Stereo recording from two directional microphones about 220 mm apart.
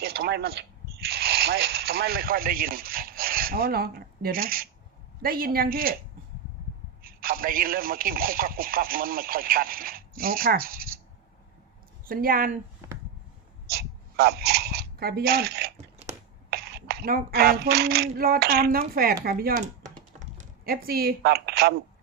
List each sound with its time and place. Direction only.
0.0 s speech: 45° right (ahead or behind)
5.2 s female singing: 40° right (ahead or behind)
7.0 s a man's voice: 40° right (ahead or behind)
12.0 s a woman's voice: 40° right (ahead or behind)
13.7 s a sound: 45° right (ahead or behind)
16.5 s female singing: 45° right (ahead or behind)
20.1 s speech: 40° right (ahead or behind)